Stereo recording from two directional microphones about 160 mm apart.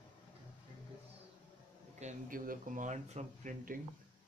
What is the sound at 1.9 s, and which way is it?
Speech, 55° right (ahead or behind).